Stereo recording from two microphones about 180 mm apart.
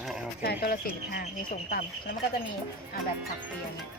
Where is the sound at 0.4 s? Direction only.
60° left (ahead or behind).